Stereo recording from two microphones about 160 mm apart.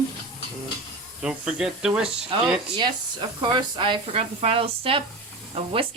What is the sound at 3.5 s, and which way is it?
Speech, 30° right (ahead or behind).